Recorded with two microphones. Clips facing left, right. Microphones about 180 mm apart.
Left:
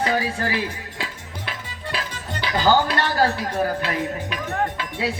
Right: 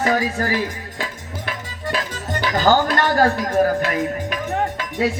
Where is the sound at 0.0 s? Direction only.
45° right (ahead or behind).